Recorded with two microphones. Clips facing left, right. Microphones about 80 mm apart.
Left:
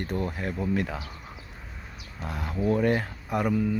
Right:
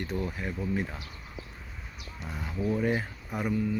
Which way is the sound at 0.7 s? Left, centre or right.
Left.